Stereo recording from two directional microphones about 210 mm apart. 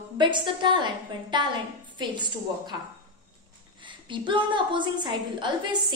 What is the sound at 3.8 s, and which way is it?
A woman's voice, 20° right (ahead or behind).